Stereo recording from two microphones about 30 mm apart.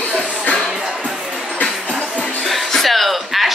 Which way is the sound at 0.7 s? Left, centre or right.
Centre.